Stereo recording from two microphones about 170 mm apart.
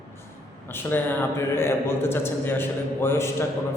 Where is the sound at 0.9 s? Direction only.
15° left (ahead or behind).